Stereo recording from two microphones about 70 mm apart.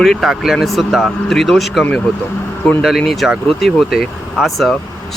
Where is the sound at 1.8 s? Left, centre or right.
Centre.